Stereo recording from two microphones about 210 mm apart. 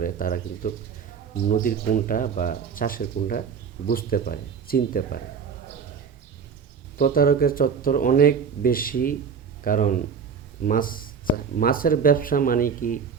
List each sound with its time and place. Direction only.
0.0 s speech: 40° left (ahead or behind)
7.0 s speech: 45° left (ahead or behind)